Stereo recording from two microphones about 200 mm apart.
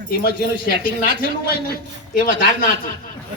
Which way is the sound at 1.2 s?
50° left (ahead or behind).